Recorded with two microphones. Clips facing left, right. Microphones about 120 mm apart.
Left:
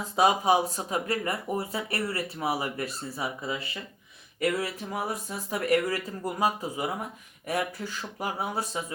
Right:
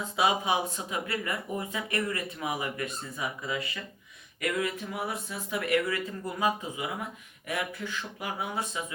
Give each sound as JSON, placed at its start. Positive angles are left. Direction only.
{"t": 0.2, "sound": "speech", "side_deg": 40}